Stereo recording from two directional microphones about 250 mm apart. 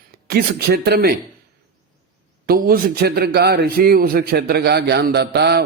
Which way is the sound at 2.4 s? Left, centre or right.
Right.